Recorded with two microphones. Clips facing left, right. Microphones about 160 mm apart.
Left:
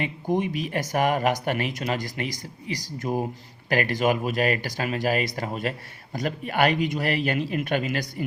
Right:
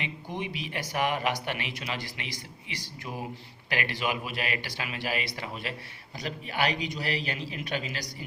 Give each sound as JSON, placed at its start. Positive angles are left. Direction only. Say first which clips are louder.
{"t": 0.0, "sound": "speech", "louder": "left 10 dB", "side_deg": 45}